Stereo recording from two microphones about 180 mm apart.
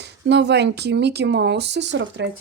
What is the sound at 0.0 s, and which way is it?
Speech, 70° right (ahead or behind).